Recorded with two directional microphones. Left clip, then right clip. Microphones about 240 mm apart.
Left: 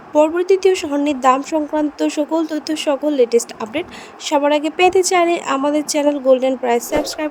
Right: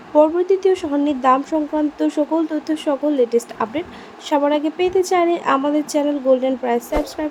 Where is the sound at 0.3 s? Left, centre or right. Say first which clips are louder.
Left 2 dB; left.